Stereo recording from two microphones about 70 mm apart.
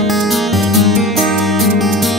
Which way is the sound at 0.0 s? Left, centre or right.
Centre.